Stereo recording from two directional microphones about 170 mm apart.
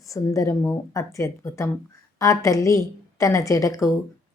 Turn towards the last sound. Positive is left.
turn(degrees=20)  # may be behind; listen again after turning